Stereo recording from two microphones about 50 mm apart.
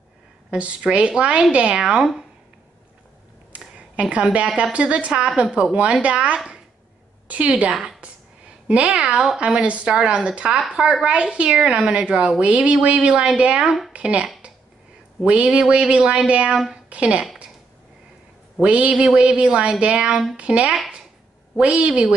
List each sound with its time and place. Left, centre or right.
0.5 s a woman's voice: right
3.5 s a sound: right
4.7 s a woman's voice: right
7.4 s a woman's voice: right
8.0 s a sound: right
9.4 s a woman's voice: right
11.1 s a woman's voice: right
15.2 s a woman's voice: right
18.6 s a woman's voice: right